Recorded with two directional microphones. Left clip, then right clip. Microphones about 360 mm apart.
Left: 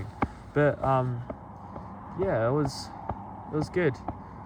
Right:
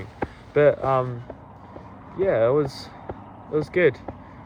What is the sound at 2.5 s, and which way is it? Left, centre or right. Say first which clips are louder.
Speech: right 6 dB; centre.